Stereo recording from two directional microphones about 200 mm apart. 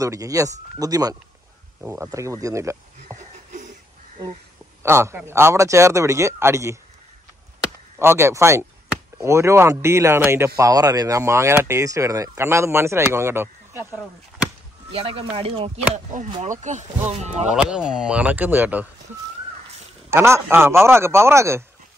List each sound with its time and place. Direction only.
0.0 s speech: 15° right (ahead or behind)
4.8 s speech: 15° right (ahead or behind)
8.0 s speech: 10° right (ahead or behind)
14.9 s speech: 30° right (ahead or behind)
17.6 s speech: 5° right (ahead or behind)
20.1 s speech: 15° right (ahead or behind)